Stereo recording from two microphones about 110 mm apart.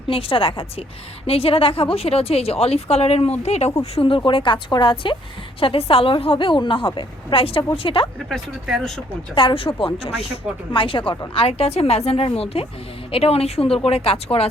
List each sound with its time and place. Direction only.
0.1 s a woman's voice: 55° left (ahead or behind); by 3.3 s 70° left (ahead or behind)
3.4 s speech: 85° left
3.9 s a woman's voice: 50° left (ahead or behind)
8.3 s speech: centre (ahead or behind)
9.3 s a woman's voice: 50° left (ahead or behind)
11.3 s a woman's voice: 60° left (ahead or behind)